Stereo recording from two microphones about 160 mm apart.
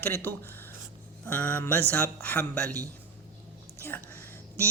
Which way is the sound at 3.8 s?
15° left (ahead or behind).